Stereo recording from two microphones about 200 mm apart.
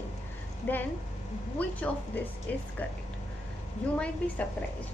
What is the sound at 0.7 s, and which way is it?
A woman's voice, 10° left (ahead or behind).